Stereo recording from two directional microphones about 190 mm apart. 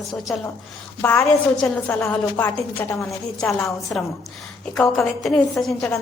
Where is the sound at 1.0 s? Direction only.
5° left (ahead or behind).